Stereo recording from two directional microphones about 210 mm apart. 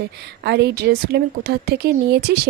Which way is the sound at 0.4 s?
50° right (ahead or behind).